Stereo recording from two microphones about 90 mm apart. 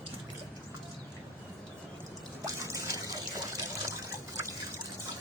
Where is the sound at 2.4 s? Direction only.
35° right (ahead or behind).